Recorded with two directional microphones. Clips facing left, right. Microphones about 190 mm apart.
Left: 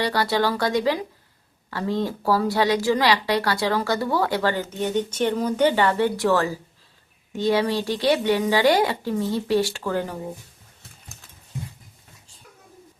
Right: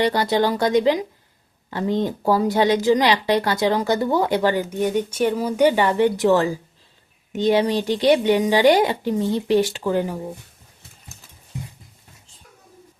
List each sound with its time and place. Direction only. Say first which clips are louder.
0.0 s a woman's voice: right 3 dB; 20° right (ahead or behind)